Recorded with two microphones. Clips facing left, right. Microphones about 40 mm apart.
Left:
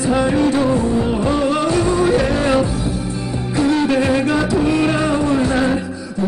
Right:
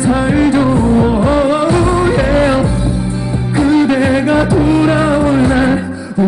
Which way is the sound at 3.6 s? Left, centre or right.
Right.